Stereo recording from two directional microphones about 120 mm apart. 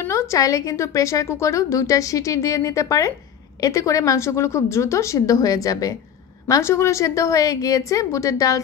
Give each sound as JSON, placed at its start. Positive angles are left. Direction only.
{"t": 0.0, "sound": "a woman's voice", "side_deg": 25}